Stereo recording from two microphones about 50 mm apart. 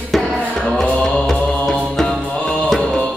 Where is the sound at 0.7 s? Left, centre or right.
Centre.